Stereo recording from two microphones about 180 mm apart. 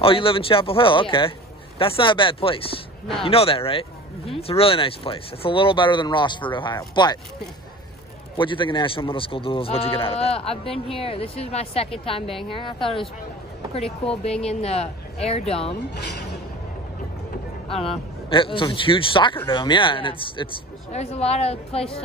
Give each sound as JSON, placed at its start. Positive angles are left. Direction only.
{"t": 0.0, "sound": "a man's voice", "side_deg": 30}
{"t": 8.4, "sound": "a man's voice", "side_deg": 25}
{"t": 14.4, "sound": "speech", "side_deg": 35}
{"t": 17.6, "sound": "a man's voice", "side_deg": 30}